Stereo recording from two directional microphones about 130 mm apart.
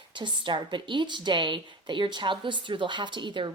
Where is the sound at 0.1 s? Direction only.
40° right (ahead or behind).